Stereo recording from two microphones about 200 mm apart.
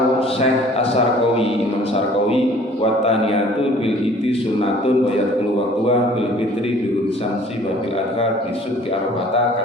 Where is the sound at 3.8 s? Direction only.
30° left (ahead or behind).